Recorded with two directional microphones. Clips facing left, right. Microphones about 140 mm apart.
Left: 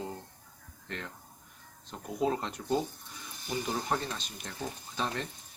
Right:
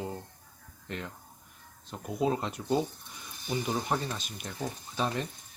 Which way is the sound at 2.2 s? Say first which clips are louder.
Right 1 dB; 10° right (ahead or behind).